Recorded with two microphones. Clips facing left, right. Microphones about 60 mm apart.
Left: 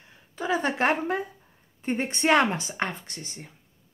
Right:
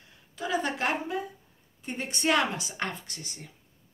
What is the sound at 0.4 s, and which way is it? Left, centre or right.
Speech, left.